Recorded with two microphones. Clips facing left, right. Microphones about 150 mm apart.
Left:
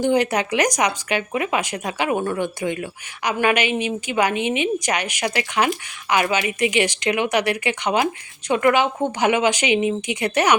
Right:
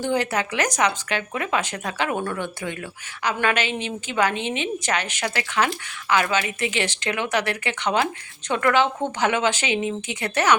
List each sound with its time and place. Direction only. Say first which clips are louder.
0.0 s a woman's voice: left 4 dB; 15° left (ahead or behind)